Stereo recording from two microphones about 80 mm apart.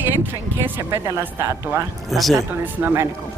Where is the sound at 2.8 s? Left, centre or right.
Right.